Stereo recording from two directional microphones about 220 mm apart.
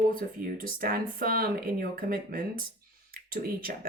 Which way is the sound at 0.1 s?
40° right (ahead or behind).